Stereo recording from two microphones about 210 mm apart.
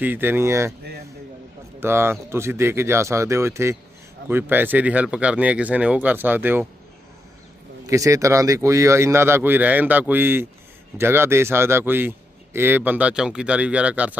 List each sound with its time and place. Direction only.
0.0 s speech: 10° right (ahead or behind)
1.8 s speech: 10° right (ahead or behind)
7.9 s speech: 15° right (ahead or behind)